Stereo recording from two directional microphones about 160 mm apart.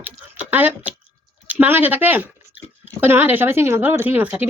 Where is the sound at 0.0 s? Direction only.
10° right (ahead or behind).